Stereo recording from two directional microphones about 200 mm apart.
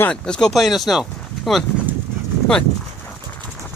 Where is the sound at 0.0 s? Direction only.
5° left (ahead or behind).